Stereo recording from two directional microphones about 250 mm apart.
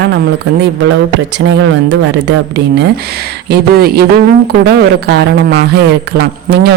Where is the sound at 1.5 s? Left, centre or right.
Right.